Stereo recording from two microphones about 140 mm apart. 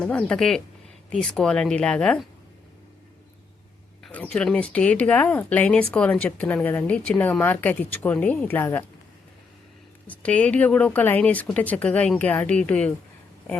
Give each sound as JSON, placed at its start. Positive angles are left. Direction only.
{"t": 0.0, "sound": "speech", "side_deg": 10}
{"t": 4.0, "sound": "speech", "side_deg": 5}
{"t": 10.1, "sound": "speech", "side_deg": 10}